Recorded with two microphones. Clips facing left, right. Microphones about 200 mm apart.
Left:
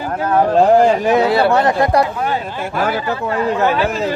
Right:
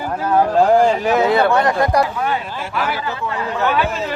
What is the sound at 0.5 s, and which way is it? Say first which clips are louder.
Speech: left 3 dB; 15° left (ahead or behind).